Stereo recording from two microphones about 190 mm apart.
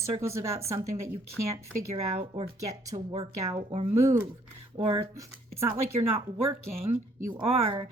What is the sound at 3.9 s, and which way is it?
Speech, 10° right (ahead or behind).